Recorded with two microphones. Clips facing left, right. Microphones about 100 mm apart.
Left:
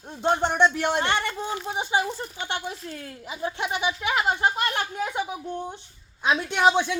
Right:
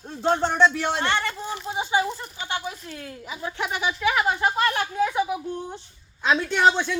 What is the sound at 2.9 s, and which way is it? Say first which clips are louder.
Speech: even; 30° left (ahead or behind).